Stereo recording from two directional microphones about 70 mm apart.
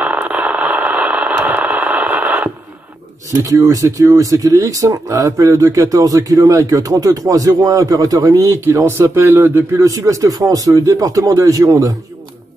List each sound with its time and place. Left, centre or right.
0.0 s radio: centre
3.3 s speech: right